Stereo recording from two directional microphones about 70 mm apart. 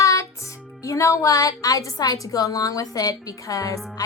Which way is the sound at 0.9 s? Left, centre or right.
Left.